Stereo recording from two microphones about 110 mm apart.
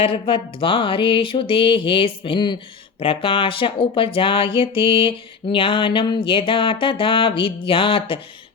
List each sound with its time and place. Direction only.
0.0 s speech: 55° left (ahead or behind)